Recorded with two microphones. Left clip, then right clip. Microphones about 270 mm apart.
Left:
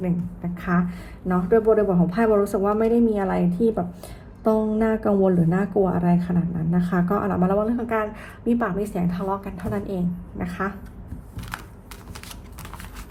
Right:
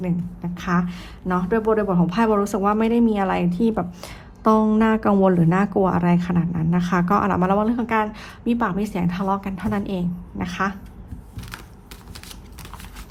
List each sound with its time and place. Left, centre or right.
0.0 s a woman's voice: centre
4.0 s a woman's voice: centre
5.2 s a woman's voice: right